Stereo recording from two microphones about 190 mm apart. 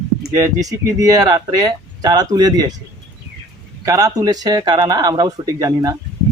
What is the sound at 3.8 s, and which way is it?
Speech, 20° right (ahead or behind).